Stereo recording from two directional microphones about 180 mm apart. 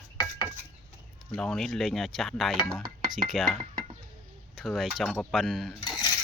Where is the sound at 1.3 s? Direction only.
5° left (ahead or behind).